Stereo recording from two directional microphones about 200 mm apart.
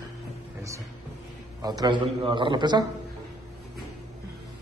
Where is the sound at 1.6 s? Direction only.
20° right (ahead or behind).